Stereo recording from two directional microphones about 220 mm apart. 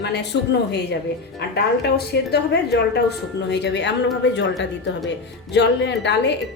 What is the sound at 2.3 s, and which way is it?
A woman's voice, 50° left (ahead or behind).